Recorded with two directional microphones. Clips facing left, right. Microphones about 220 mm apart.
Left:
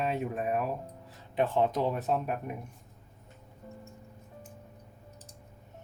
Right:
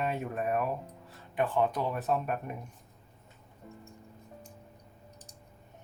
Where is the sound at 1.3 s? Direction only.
25° left (ahead or behind).